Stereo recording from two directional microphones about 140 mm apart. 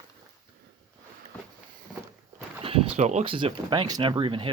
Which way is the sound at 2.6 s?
45° right (ahead or behind).